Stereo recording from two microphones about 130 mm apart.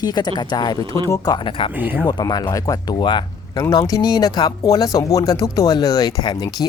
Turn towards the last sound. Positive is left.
turn(degrees=30)  # may be behind; listen again after turning